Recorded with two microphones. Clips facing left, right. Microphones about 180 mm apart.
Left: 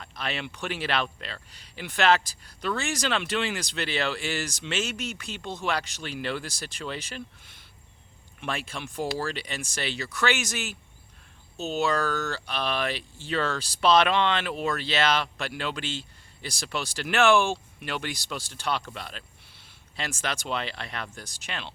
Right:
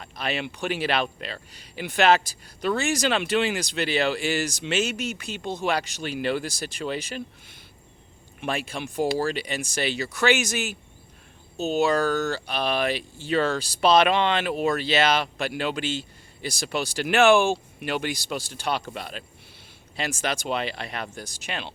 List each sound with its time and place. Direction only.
0.0 s speech: 10° right (ahead or behind)
8.4 s speech: 10° right (ahead or behind)